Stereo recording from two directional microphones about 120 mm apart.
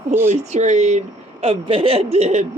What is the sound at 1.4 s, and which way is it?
Speech, 50° right (ahead or behind).